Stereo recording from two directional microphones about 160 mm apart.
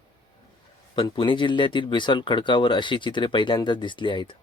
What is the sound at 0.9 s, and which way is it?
Speech, 30° left (ahead or behind).